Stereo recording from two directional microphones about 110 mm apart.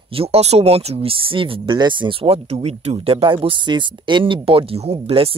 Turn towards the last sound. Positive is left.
turn(degrees=-55)  # may be behind; listen again after turning